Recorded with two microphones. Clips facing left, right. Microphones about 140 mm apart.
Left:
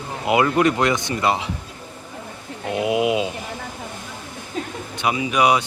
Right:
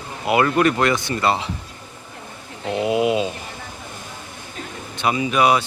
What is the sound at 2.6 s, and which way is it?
Speech, 15° left (ahead or behind).